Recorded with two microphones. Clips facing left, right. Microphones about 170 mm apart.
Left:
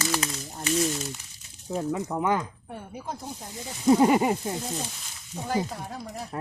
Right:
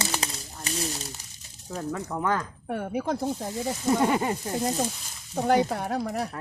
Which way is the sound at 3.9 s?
10° left (ahead or behind).